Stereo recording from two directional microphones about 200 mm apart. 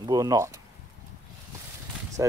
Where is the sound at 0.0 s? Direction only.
20° right (ahead or behind).